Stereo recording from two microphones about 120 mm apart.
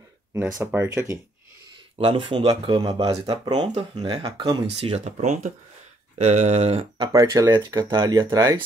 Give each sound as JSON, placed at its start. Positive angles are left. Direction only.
{"t": 0.3, "sound": "speech", "side_deg": -25}
{"t": 2.0, "sound": "speech", "side_deg": -45}
{"t": 3.1, "sound": "speech", "side_deg": -50}
{"t": 4.7, "sound": "speech", "side_deg": -55}
{"t": 6.1, "sound": "speech", "side_deg": -75}
{"t": 7.1, "sound": "speech", "side_deg": -30}